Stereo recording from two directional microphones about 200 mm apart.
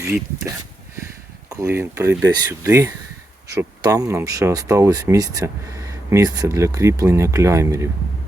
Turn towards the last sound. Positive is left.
turn(degrees=-15)  # may be behind; listen again after turning